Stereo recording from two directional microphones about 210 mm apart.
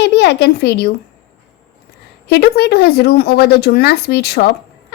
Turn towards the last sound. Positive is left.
turn(degrees=50)  # may be behind; listen again after turning